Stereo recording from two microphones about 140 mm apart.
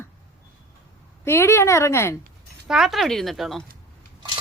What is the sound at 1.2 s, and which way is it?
Speech, 20° left (ahead or behind).